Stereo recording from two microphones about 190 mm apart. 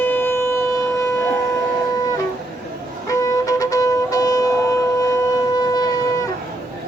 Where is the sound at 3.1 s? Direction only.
15° left (ahead or behind).